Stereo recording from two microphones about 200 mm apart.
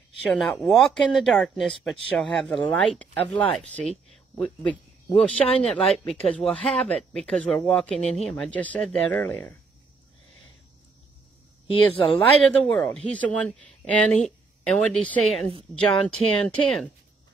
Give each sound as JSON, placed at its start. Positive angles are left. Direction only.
{"t": 0.3, "sound": "speech", "side_deg": 0}
{"t": 11.6, "sound": "speech", "side_deg": 25}
{"t": 12.4, "sound": "speech", "side_deg": 5}